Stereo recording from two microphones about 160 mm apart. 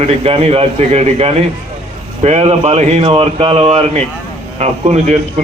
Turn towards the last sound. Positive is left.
turn(degrees=-45)  # may be behind; listen again after turning